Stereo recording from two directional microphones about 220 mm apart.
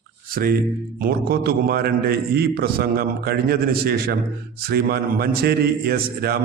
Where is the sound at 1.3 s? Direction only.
45° right (ahead or behind).